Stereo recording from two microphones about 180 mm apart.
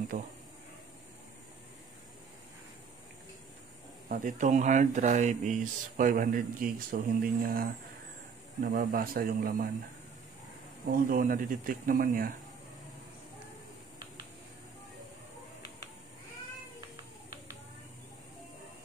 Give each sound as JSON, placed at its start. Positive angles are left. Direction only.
{"t": 0.1, "sound": "speech", "side_deg": -45}
{"t": 4.1, "sound": "speech", "side_deg": -45}
{"t": 11.1, "sound": "speech", "side_deg": -50}